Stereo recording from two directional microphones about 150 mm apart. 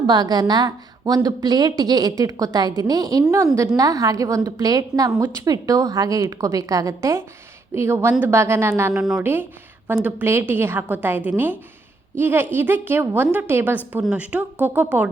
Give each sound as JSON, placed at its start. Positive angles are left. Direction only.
{"t": 0.0, "sound": "a woman's voice", "side_deg": -30}
{"t": 9.0, "sound": "speech", "side_deg": -5}
{"t": 9.2, "sound": "a woman's voice", "side_deg": -15}